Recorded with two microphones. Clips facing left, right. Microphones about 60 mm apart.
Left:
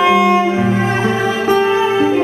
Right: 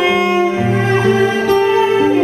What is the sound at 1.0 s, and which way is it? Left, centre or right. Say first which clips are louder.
Music: right 4 dB; left.